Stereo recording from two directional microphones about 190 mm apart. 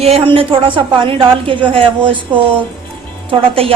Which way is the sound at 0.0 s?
30° right (ahead or behind).